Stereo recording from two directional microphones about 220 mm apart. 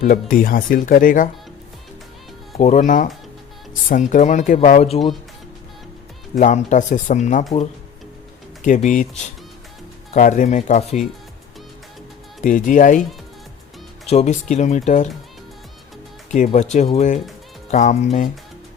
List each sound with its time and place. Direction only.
0.0 s speech: 35° left (ahead or behind)
2.6 s speech: 30° left (ahead or behind)
4.1 s speech: 35° left (ahead or behind)
6.3 s speech: 35° left (ahead or behind)
8.6 s speech: 35° left (ahead or behind)
10.1 s speech: 35° left (ahead or behind)
12.4 s speech: 35° left (ahead or behind)
14.1 s speech: 30° left (ahead or behind)
16.3 s speech: 35° left (ahead or behind)